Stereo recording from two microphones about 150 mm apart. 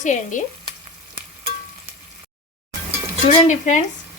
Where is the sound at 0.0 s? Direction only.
55° left (ahead or behind).